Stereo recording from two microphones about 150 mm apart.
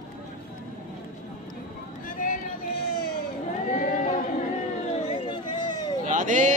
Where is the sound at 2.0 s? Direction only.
60° left (ahead or behind).